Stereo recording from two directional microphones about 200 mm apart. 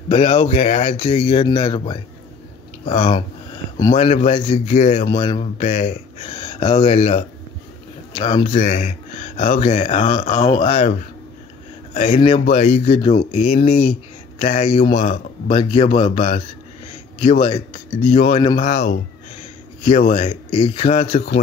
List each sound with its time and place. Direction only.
0.1 s speech: 30° left (ahead or behind)
5.1 s speech: 20° left (ahead or behind)